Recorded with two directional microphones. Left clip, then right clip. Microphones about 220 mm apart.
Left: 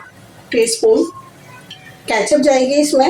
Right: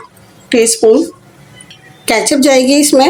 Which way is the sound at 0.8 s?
20° right (ahead or behind).